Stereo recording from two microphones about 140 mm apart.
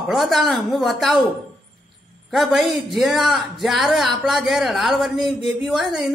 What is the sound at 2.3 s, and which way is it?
A man's voice, centre (ahead or behind).